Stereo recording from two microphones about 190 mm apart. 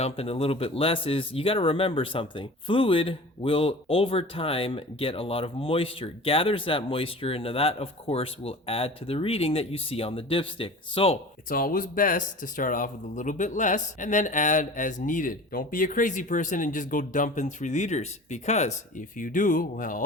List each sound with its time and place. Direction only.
0.0 s speech: 30° left (ahead or behind)
11.4 s speech: 50° left (ahead or behind)